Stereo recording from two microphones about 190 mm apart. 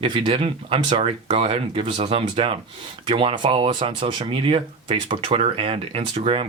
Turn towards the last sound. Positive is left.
turn(degrees=-30)  # may be behind; listen again after turning